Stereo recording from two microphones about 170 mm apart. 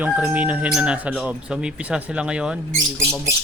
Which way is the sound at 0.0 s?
10° right (ahead or behind).